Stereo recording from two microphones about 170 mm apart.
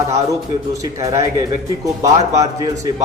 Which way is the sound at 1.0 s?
20° right (ahead or behind).